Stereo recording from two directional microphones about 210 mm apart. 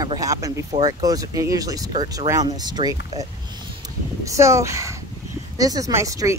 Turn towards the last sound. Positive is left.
turn(degrees=-15)  # may be behind; listen again after turning